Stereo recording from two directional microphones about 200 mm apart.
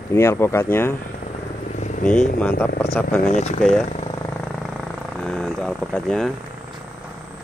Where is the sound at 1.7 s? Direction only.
40° left (ahead or behind).